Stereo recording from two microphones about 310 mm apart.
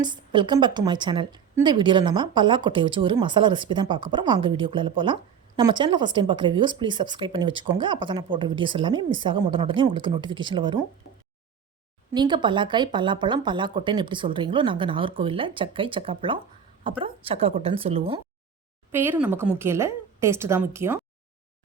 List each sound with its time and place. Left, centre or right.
0.0 s speech: centre
12.1 s speech: centre
18.9 s speech: centre